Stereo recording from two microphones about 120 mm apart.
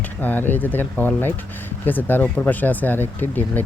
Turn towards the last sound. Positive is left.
turn(degrees=15)  # may be behind; listen again after turning